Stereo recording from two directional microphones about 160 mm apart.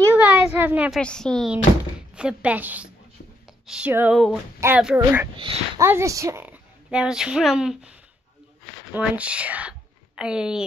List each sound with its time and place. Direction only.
0.0 s a sound: 10° right (ahead or behind)
1.0 s speech: 5° left (ahead or behind)
2.1 s a woman's voice: 5° right (ahead or behind)
8.9 s speech: 10° right (ahead or behind)